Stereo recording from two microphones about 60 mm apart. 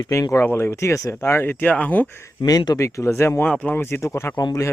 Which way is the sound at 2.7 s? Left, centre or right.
Left.